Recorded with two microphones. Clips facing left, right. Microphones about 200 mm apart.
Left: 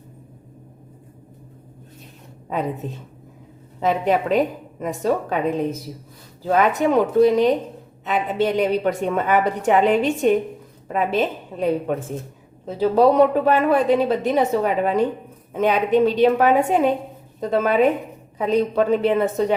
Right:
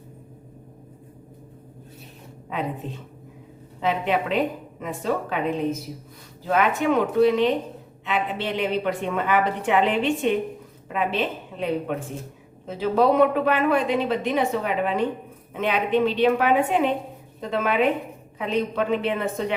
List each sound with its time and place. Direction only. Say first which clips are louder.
3.8 s a woman's voice: left 4 dB; 40° left (ahead or behind)